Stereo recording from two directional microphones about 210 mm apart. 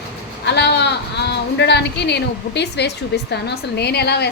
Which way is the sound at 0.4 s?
55° left (ahead or behind).